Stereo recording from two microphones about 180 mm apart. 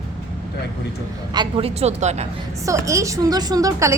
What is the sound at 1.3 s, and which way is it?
Speech, 30° right (ahead or behind).